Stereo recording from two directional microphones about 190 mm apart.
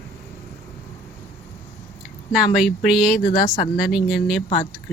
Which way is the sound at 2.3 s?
5° right (ahead or behind).